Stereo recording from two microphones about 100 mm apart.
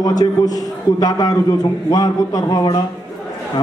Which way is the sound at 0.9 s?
40° left (ahead or behind).